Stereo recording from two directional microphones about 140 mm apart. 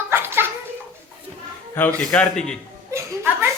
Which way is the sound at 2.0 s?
5° left (ahead or behind).